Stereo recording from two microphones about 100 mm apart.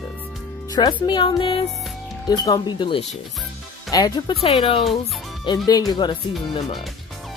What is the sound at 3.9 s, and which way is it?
Speech, 40° left (ahead or behind).